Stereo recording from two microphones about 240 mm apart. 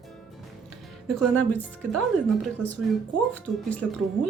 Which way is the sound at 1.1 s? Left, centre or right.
Centre.